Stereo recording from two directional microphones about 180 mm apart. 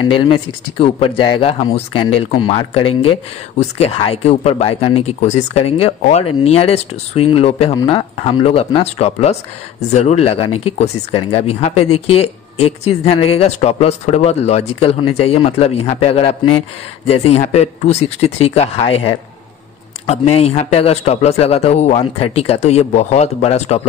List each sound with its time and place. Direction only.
0.0 s speech: 25° left (ahead or behind)
20.1 s speech: 35° left (ahead or behind)